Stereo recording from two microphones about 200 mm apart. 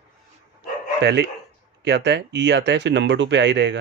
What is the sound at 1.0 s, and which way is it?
Speech, 55° right (ahead or behind).